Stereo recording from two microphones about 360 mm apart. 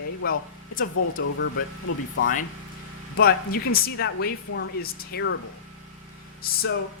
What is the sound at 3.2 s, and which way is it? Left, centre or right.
Speech, left.